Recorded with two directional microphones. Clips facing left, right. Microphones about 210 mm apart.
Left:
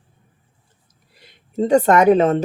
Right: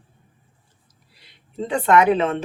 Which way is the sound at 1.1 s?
50° left (ahead or behind).